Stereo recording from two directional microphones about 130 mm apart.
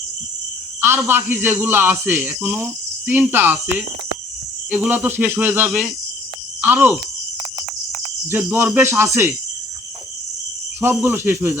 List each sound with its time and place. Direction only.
0.8 s a man's voice: 15° right (ahead or behind)
8.3 s a man's voice: 15° right (ahead or behind)
10.8 s a man's voice: 15° right (ahead or behind)